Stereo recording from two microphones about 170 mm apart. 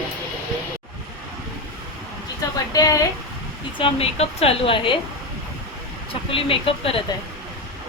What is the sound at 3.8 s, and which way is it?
Speech, 35° left (ahead or behind).